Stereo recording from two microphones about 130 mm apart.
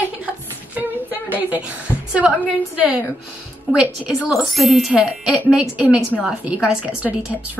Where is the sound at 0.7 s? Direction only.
15° right (ahead or behind).